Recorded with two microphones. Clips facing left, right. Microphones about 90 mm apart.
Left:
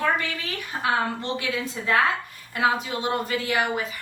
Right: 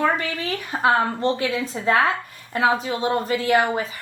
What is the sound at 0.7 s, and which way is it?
A woman's voice, 40° right (ahead or behind).